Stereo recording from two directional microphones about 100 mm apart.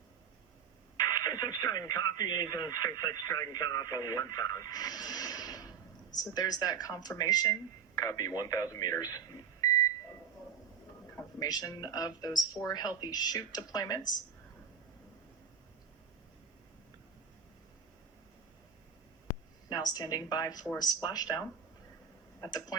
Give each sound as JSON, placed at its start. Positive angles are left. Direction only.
{"t": 0.9, "sound": "speech", "side_deg": 40}
{"t": 11.3, "sound": "speech", "side_deg": 40}
{"t": 19.6, "sound": "speech", "side_deg": 40}